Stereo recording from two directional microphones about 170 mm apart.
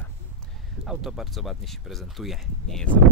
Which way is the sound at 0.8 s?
Centre (ahead or behind).